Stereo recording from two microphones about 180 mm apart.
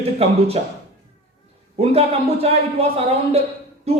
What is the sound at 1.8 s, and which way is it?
Speech, 35° right (ahead or behind).